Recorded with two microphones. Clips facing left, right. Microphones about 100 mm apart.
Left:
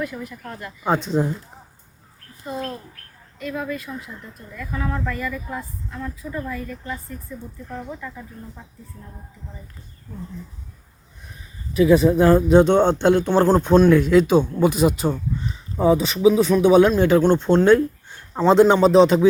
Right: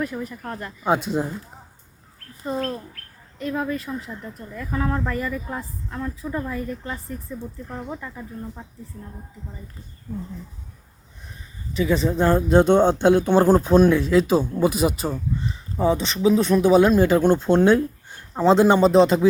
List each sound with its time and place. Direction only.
0.0 s a woman's voice: 40° right (ahead or behind)
0.9 s speech: 5° right (ahead or behind)
3.3 s a woman's voice: 35° right (ahead or behind)
11.7 s speech: 10° left (ahead or behind); by 18.4 s 10° right (ahead or behind)
18.4 s speech: centre (ahead or behind)